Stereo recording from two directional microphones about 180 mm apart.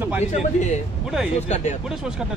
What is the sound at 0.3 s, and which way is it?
A man's voice, 40° left (ahead or behind).